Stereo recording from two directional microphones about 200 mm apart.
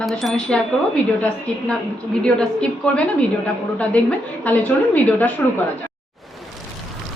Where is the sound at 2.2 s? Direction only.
5° left (ahead or behind).